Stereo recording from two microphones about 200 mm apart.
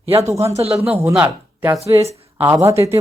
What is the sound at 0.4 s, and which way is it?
Speech, 30° right (ahead or behind).